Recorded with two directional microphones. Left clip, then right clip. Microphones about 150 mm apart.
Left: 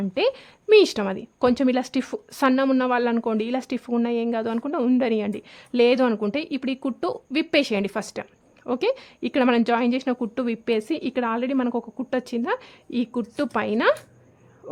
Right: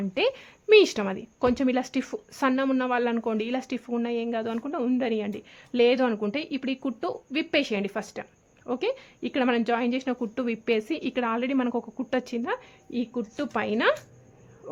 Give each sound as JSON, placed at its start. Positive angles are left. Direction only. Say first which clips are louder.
{"t": 0.0, "sound": "a woman's voice", "louder": "left 3 dB", "side_deg": 30}